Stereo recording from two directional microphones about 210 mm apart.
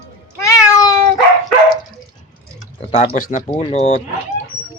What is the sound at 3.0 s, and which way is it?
Speech, 40° left (ahead or behind).